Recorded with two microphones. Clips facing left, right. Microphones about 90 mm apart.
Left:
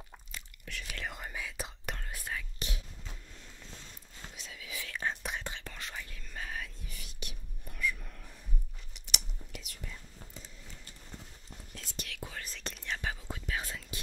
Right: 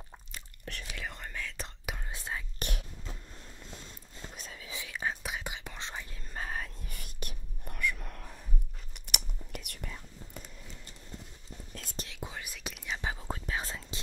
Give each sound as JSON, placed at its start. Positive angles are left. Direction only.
{"t": 0.7, "sound": "speech", "side_deg": -40}
{"t": 1.0, "sound": "whispering", "side_deg": 5}
{"t": 2.0, "sound": "whispering", "side_deg": -25}
{"t": 2.6, "sound": "whispering", "side_deg": -55}
{"t": 4.4, "sound": "whispering", "side_deg": -40}
{"t": 4.7, "sound": "whispering", "side_deg": -10}
{"t": 5.8, "sound": "whispering", "side_deg": -25}
{"t": 6.3, "sound": "whispering", "side_deg": -40}
{"t": 11.7, "sound": "whispering", "side_deg": -50}
{"t": 12.1, "sound": "whispering", "side_deg": -20}
{"t": 13.3, "sound": "whispering", "side_deg": -30}